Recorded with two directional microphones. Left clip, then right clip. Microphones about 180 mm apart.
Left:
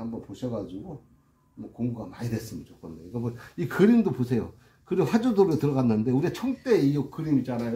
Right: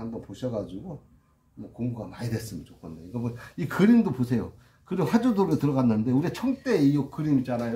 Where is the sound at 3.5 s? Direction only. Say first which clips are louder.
Left 1 dB; 20° left (ahead or behind).